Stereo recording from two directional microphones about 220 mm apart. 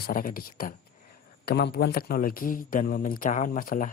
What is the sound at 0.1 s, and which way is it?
A man's voice, 40° left (ahead or behind).